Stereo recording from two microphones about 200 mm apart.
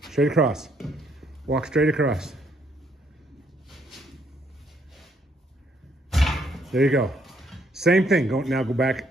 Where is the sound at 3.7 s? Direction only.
Centre (ahead or behind).